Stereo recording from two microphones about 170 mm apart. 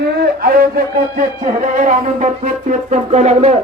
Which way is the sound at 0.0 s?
65° right (ahead or behind).